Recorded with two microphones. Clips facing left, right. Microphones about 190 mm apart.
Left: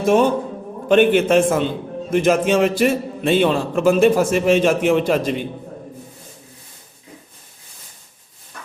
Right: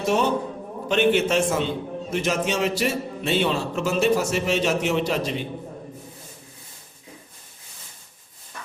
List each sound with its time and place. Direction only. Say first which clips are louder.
0.0 s a man's voice: left 6 dB; 50° left (ahead or behind)